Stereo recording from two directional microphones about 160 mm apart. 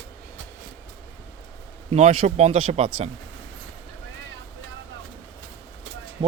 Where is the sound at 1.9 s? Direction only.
40° right (ahead or behind).